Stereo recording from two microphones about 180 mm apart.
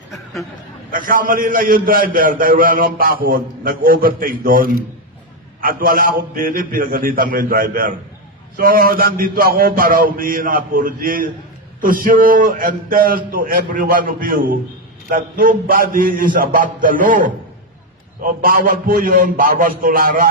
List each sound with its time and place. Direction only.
0.9 s a man's voice: 50° right (ahead or behind)